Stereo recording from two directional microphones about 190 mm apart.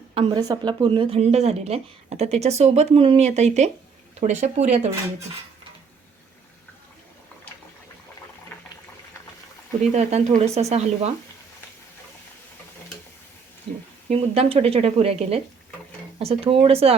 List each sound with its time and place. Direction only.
0.1 s a woman's voice: 30° right (ahead or behind)
9.9 s a woman's voice: 35° right (ahead or behind)
14.1 s a woman's voice: 30° right (ahead or behind)